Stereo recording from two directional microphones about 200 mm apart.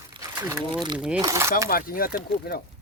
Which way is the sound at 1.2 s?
15° right (ahead or behind).